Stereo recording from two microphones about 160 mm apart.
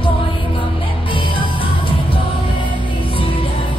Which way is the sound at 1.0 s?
30° left (ahead or behind).